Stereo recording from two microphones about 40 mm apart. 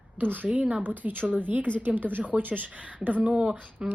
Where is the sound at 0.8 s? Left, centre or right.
Right.